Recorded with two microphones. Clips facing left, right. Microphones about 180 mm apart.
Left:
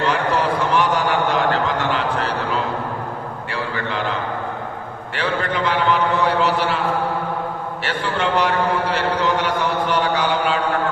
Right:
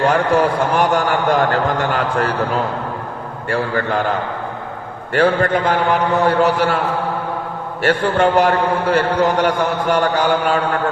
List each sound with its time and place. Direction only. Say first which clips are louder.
0.0 s a sound: right 5 dB; 50° right (ahead or behind)
3.5 s a man's voice: right 8 dB; 45° right (ahead or behind)
5.1 s a man's voice: right 8 dB; 45° right (ahead or behind)
7.8 s a man's voice: right 9 dB; 50° right (ahead or behind)